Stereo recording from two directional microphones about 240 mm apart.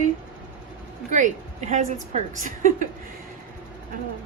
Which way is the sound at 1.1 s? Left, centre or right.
Right.